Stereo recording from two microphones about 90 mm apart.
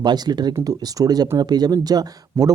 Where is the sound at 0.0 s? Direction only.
50° right (ahead or behind).